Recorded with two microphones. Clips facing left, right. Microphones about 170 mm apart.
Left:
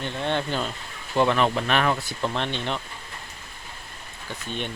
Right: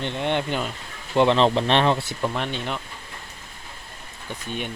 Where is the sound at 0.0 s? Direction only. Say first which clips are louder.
Right 2 dB; 20° right (ahead or behind).